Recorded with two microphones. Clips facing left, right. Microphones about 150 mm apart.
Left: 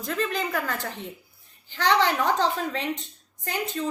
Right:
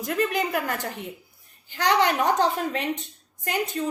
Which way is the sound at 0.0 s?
15° right (ahead or behind).